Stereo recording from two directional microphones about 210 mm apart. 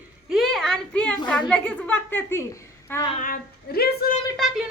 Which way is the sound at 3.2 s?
40° left (ahead or behind).